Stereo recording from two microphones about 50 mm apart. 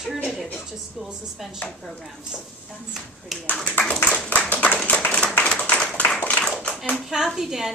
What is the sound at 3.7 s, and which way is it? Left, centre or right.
Clapping, left.